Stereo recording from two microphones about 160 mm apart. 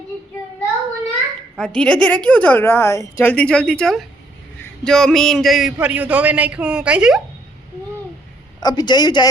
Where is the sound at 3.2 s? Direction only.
10° left (ahead or behind).